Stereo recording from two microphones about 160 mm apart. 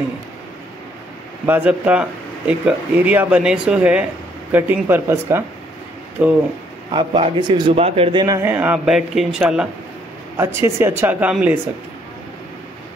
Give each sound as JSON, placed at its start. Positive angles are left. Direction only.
{"t": 1.4, "sound": "speech", "side_deg": -10}
{"t": 6.9, "sound": "a man's voice", "side_deg": -30}
{"t": 7.7, "sound": "speech", "side_deg": -40}
{"t": 8.4, "sound": "speech", "side_deg": -10}
{"t": 10.3, "sound": "speech", "side_deg": -15}